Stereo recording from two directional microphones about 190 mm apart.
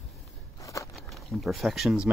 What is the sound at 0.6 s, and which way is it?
Crackle, 15° left (ahead or behind).